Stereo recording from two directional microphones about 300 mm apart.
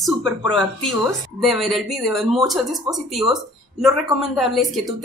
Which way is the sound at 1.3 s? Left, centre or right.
Centre.